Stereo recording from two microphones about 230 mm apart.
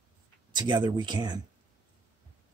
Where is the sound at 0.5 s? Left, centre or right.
Centre.